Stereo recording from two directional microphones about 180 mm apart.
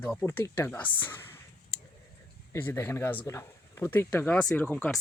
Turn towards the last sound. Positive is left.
turn(degrees=10)  # may be behind; listen again after turning